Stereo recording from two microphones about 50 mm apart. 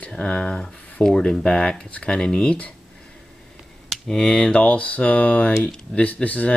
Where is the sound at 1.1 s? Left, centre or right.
Centre.